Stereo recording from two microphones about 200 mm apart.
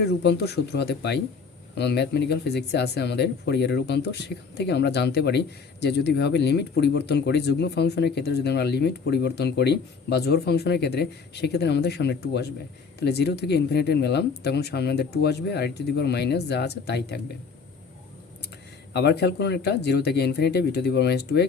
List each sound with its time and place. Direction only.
0.0 s speech: 55° left (ahead or behind)
18.9 s speech: 55° left (ahead or behind)